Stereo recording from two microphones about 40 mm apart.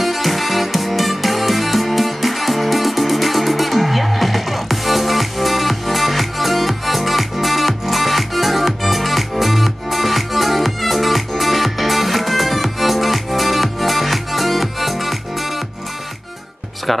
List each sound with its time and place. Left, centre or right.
0.0 s music: centre